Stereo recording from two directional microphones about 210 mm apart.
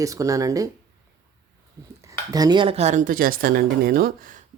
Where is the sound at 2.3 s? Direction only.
20° right (ahead or behind); by 4.4 s 40° right (ahead or behind).